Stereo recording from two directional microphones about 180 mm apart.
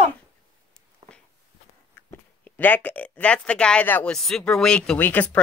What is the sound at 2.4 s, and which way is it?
Speech, 10° left (ahead or behind).